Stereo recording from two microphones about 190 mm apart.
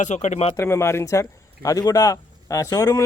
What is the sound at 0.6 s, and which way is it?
A man's voice, 15° left (ahead or behind).